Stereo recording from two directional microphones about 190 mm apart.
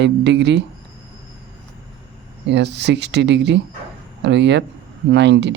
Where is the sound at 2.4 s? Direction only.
65° right (ahead or behind).